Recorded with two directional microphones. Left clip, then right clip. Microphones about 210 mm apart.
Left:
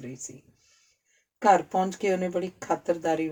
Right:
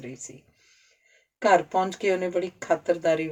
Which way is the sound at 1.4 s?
50° left (ahead or behind).